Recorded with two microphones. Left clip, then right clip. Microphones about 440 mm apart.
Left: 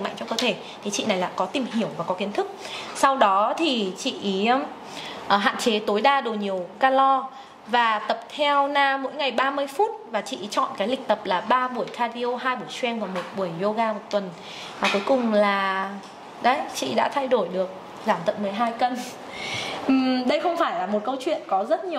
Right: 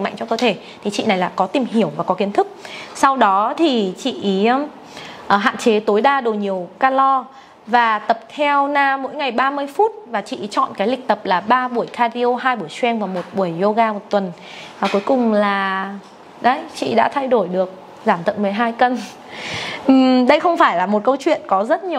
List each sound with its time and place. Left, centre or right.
0.0 s a woman's voice: right
15.0 s a woman's voice: right